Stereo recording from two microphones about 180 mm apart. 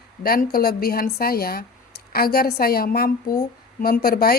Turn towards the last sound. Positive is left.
turn(degrees=55)  # may be behind; listen again after turning